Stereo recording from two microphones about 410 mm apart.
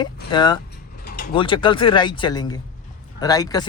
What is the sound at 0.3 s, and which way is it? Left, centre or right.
Speech, centre.